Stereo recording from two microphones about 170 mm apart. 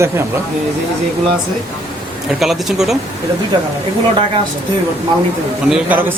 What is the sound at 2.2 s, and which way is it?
Speech, centre (ahead or behind).